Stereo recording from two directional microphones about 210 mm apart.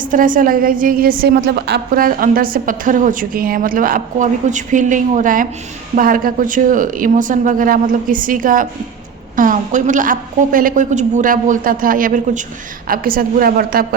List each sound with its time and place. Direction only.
0.0 s a woman's voice: 40° right (ahead or behind)